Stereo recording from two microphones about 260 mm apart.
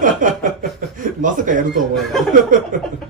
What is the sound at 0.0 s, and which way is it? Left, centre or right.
Chuckle, right.